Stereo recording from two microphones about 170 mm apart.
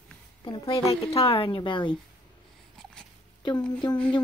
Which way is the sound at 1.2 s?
35° left (ahead or behind).